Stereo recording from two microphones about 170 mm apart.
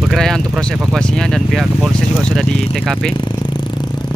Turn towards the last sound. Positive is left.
turn(degrees=0)  # may be behind; listen again after turning